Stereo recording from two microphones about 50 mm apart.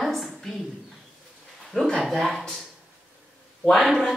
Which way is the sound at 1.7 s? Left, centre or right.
Centre.